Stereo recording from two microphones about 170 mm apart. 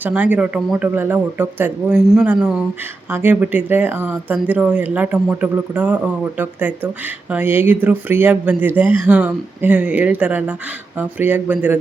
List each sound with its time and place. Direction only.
0.0 s speech: 10° right (ahead or behind)